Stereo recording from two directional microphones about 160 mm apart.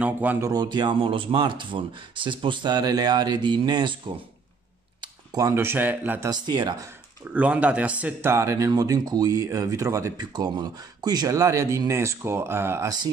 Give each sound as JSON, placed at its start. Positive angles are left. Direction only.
{"t": 0.0, "sound": "speech", "side_deg": -10}
{"t": 0.5, "sound": "speech", "side_deg": -25}
{"t": 5.0, "sound": "speech", "side_deg": -25}
{"t": 6.3, "sound": "speech", "side_deg": -25}
{"t": 7.3, "sound": "speech", "side_deg": -10}